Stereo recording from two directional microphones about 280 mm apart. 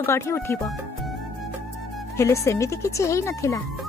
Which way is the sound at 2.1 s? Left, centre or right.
Centre.